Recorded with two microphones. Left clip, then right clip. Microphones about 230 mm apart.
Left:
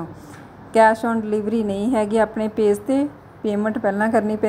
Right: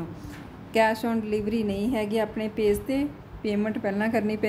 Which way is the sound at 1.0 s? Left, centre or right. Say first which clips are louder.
Left 6 dB; centre.